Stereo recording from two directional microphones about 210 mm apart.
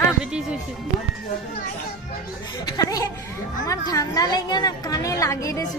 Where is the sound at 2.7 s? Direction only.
15° left (ahead or behind).